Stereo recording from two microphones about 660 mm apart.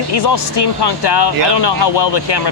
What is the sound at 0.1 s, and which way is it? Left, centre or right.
Speech, left.